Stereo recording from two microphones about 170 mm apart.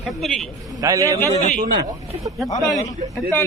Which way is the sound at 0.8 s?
20° right (ahead or behind).